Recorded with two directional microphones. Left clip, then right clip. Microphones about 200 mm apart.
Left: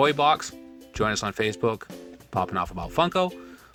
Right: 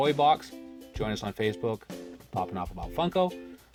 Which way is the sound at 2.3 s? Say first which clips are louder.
Left 6 dB; 45° left (ahead or behind).